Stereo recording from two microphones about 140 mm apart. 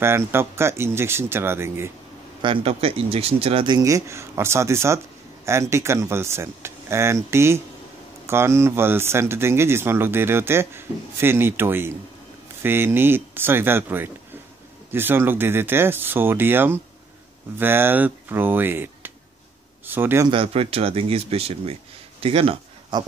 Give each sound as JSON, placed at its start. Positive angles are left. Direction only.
{"t": 0.0, "sound": "speech", "side_deg": -20}
{"t": 2.4, "sound": "speech", "side_deg": -40}
{"t": 20.2, "sound": "speech", "side_deg": -40}